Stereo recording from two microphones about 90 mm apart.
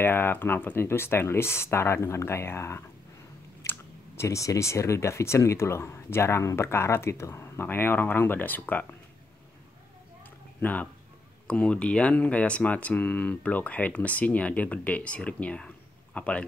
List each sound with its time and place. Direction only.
0.0 s speech: 25° left (ahead or behind)
3.6 s a sound: 35° left (ahead or behind)
4.2 s speech: 35° left (ahead or behind); by 8.8 s 20° left (ahead or behind)
10.6 s speech: 15° left (ahead or behind)